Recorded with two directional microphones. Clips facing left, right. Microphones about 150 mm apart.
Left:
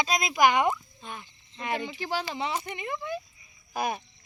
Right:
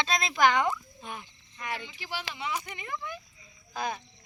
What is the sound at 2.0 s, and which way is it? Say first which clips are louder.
Speech: left 7 dB; 40° left (ahead or behind).